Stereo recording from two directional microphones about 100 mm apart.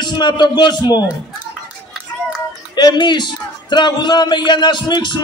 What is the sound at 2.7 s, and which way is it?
A man's voice, 45° left (ahead or behind).